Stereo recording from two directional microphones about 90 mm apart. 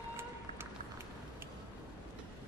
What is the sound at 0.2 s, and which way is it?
Music, 25° right (ahead or behind).